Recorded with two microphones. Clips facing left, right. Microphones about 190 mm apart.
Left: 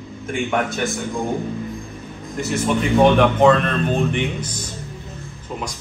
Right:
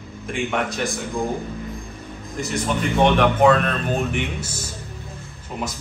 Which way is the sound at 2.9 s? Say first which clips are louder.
Left 3 dB; centre (ahead or behind).